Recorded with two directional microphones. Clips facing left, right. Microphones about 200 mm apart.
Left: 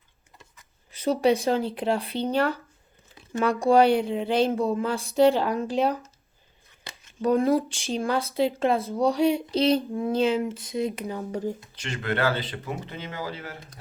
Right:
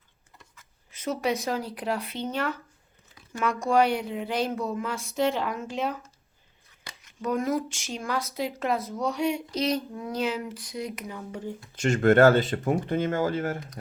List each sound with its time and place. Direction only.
0.9 s speech: 35° left (ahead or behind)
11.7 s speech: 45° right (ahead or behind)